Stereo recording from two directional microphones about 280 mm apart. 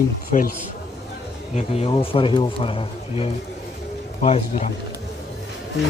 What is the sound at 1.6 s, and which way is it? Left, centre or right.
Speech, left.